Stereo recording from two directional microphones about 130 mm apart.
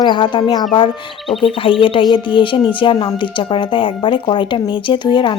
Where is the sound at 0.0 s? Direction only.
40° left (ahead or behind).